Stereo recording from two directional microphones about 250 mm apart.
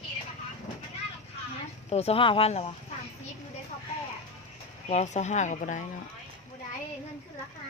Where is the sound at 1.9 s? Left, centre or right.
Left.